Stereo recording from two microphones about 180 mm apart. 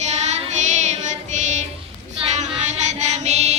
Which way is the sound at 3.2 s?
35° right (ahead or behind).